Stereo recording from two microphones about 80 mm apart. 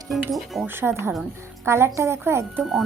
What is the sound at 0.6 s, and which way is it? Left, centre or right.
A woman's voice, right.